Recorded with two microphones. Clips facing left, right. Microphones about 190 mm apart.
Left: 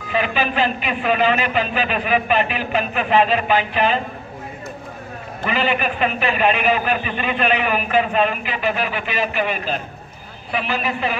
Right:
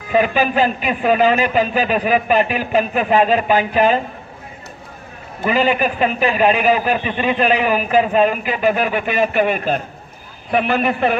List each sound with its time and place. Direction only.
0.1 s a man's voice: 45° right (ahead or behind)
5.5 s a man's voice: 40° right (ahead or behind)